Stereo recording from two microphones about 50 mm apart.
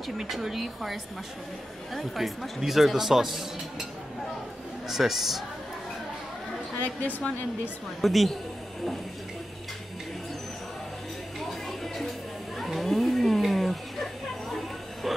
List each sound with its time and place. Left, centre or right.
0.0 s speech: centre
2.0 s speech: centre
4.8 s speech: centre
6.8 s speech: left
8.0 s speech: centre
11.3 s a sound: centre